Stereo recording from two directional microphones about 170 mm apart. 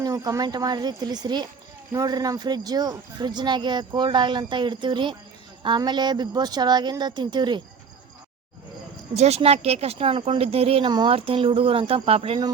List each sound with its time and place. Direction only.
0.0 s speech: 20° right (ahead or behind)
9.1 s speech: 40° right (ahead or behind)